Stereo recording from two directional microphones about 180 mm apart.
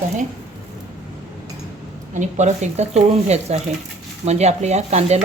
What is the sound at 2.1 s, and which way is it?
A woman's voice, 40° right (ahead or behind).